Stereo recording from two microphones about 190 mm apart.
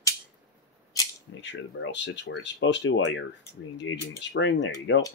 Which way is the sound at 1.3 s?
70° left (ahead or behind).